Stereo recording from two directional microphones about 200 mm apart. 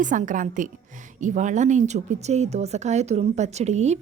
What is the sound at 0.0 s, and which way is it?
Speech, 40° right (ahead or behind).